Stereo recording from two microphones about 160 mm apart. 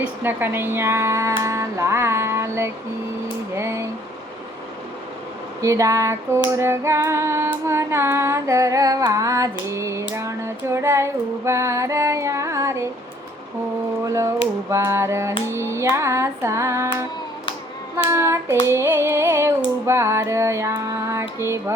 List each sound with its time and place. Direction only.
0.0 s female singing: 10° right (ahead or behind)
3.5 s speech: 15° right (ahead or behind)
5.6 s a sound: 20° right (ahead or behind)
6.5 s female singing: 15° right (ahead or behind)
14.0 s a sound: 20° right (ahead or behind)
14.7 s female singing: 15° right (ahead or behind)
18.1 s female singing: 15° right (ahead or behind)